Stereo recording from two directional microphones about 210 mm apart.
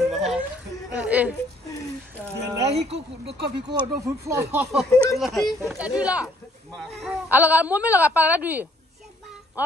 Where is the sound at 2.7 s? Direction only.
55° right (ahead or behind).